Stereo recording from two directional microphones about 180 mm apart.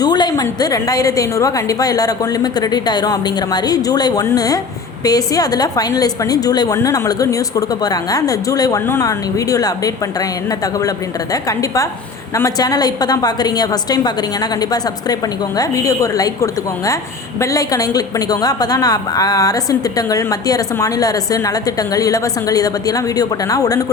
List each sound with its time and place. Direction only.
0.0 s a woman's voice: 25° left (ahead or behind)
15.5 s a woman's voice: 20° left (ahead or behind)